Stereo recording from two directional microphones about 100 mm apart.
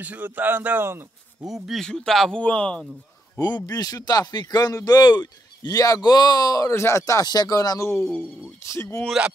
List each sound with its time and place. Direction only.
0.0 s a man's voice: 15° right (ahead or behind)
1.5 s speech: centre (ahead or behind)
3.3 s speech: 40° left (ahead or behind)
6.7 s speech: 30° left (ahead or behind)